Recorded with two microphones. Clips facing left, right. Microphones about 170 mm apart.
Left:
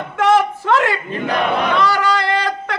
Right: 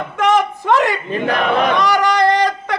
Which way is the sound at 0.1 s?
15° right (ahead or behind).